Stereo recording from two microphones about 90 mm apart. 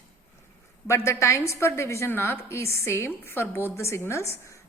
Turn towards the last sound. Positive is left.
turn(degrees=30)  # may be behind; listen again after turning